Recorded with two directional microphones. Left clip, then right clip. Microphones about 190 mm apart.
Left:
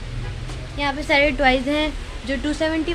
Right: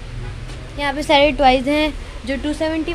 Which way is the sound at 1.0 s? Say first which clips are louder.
Right 5 dB; 25° right (ahead or behind).